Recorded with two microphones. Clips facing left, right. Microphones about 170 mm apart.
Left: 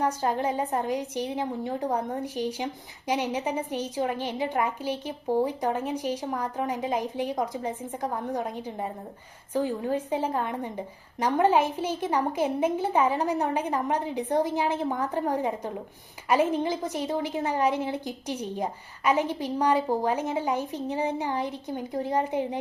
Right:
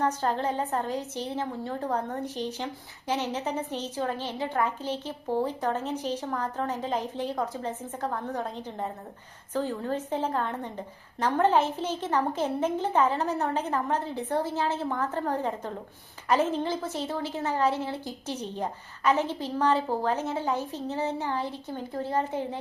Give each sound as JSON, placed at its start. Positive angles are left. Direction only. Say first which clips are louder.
{"t": 0.0, "sound": "a woman's voice", "louder": "left 1 dB", "side_deg": 10}